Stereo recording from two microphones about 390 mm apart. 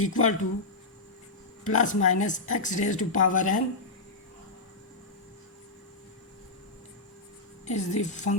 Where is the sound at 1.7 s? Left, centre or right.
Centre.